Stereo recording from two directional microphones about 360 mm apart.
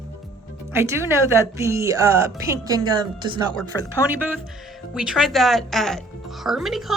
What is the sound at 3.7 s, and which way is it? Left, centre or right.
Speech, centre.